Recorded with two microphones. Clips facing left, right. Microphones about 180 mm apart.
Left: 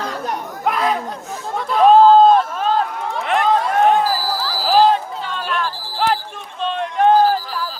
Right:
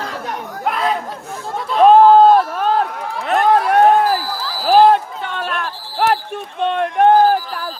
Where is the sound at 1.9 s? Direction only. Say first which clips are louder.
Right 1 dB; 65° right (ahead or behind).